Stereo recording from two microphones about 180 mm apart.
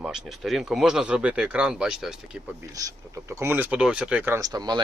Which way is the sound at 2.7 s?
20° right (ahead or behind).